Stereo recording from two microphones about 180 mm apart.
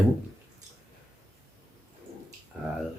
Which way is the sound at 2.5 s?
5° right (ahead or behind).